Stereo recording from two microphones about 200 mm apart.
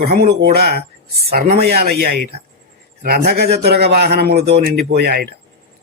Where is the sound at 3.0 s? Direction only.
50° right (ahead or behind).